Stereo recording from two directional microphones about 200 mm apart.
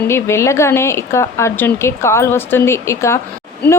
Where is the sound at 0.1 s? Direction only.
15° left (ahead or behind).